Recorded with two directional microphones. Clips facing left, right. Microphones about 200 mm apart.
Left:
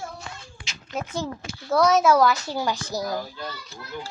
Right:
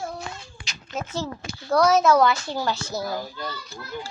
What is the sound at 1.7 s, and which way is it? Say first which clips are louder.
A woman's voice: even; centre (ahead or behind).